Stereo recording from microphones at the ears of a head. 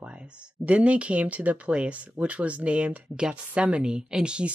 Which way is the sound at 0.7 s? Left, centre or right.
Centre.